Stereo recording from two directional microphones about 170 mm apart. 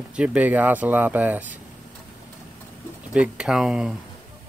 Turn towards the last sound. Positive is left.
turn(degrees=-5)  # may be behind; listen again after turning